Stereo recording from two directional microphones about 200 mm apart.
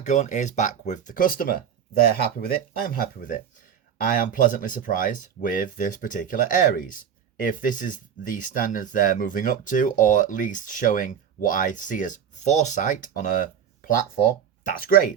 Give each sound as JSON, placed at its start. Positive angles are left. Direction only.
{"t": 0.0, "sound": "speech", "side_deg": 40}